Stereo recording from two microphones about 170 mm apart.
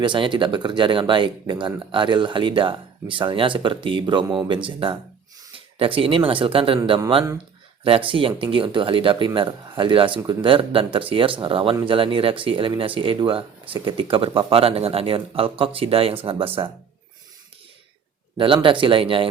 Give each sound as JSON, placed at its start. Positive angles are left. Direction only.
{"t": 0.0, "sound": "speech", "side_deg": -30}
{"t": 7.9, "sound": "speech", "side_deg": -30}
{"t": 18.3, "sound": "speech", "side_deg": -30}